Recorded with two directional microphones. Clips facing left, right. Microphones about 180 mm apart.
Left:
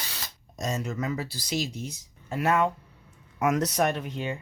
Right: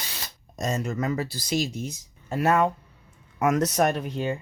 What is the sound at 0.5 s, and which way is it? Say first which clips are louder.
Speech: right 3 dB; 50° right (ahead or behind).